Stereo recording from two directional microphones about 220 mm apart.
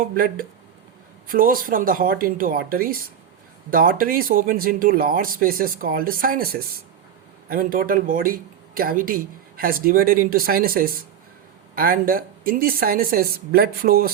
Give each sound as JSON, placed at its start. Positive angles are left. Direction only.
{"t": 0.0, "sound": "a woman's voice", "side_deg": -40}